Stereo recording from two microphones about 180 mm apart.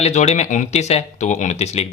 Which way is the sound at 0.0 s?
40° left (ahead or behind).